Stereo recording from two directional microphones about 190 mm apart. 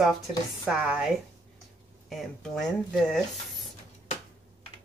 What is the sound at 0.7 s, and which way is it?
Speech, 5° right (ahead or behind).